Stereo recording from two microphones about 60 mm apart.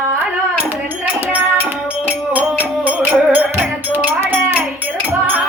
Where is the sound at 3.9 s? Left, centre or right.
Right.